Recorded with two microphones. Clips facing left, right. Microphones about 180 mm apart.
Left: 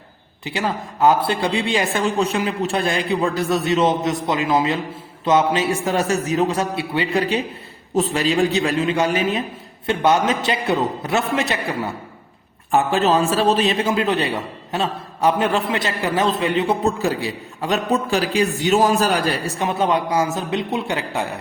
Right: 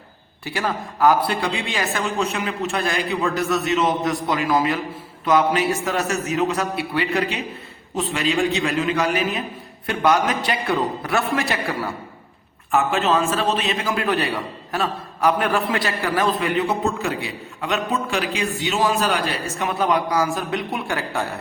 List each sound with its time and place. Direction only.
0.4 s a man's voice: 20° left (ahead or behind)
12.7 s a man's voice: 35° left (ahead or behind); by 21.2 s 20° left (ahead or behind)